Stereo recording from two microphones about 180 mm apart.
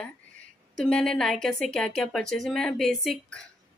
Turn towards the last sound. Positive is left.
turn(degrees=0)  # may be behind; listen again after turning